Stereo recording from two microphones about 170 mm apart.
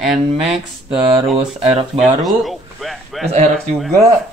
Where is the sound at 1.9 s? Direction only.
Centre (ahead or behind).